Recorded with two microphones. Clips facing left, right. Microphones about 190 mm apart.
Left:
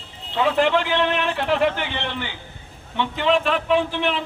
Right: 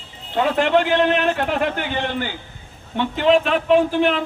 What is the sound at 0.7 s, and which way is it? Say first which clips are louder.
Speech: right 4 dB; 45° right (ahead or behind).